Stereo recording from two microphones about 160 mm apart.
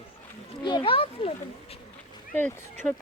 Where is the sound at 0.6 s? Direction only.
30° left (ahead or behind).